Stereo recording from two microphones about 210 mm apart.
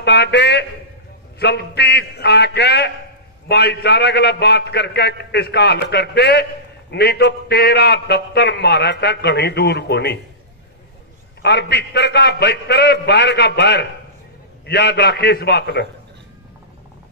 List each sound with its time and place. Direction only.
0.0 s a man's voice: 55° left (ahead or behind)
11.4 s a man's voice: 55° left (ahead or behind)